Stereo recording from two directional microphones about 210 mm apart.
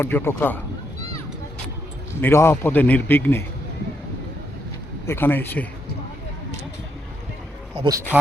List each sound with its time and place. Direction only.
0.0 s speech: 10° left (ahead or behind)
2.2 s speech: 10° left (ahead or behind)
5.0 s speech: 10° left (ahead or behind)
7.8 s speech: 15° right (ahead or behind)